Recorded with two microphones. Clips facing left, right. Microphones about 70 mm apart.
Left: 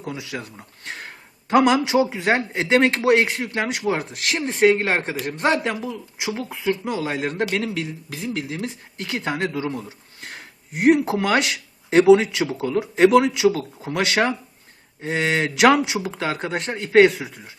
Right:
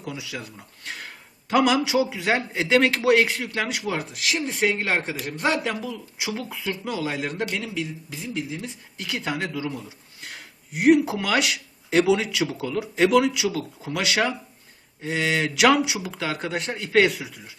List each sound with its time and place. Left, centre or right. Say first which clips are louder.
0.0 s speech: left 3 dB; left
4.1 s speech: left 1 dB; left
4.4 s speech: left 8 dB; left
7.5 s a man's voice: left 4 dB; left
8.3 s speech: left 3 dB; left
9.0 s speech: left 3 dB; left